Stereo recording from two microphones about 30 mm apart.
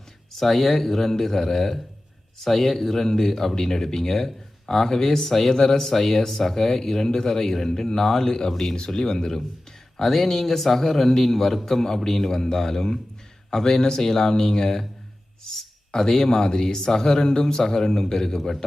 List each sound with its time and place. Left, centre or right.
0.3 s speech: centre
15.9 s speech: centre